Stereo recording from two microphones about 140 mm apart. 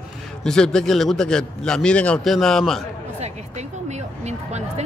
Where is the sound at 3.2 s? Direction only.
55° right (ahead or behind).